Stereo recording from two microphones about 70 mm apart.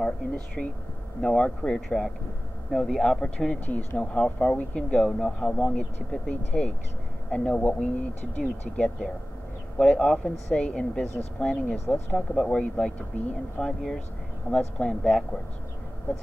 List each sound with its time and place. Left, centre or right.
0.6 s speech: centre
3.6 s speech: left
4.0 s speech: centre